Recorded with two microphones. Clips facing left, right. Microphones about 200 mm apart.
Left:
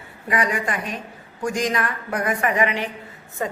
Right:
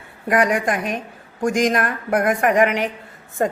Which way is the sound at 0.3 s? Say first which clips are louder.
Right 5 dB; 50° right (ahead or behind).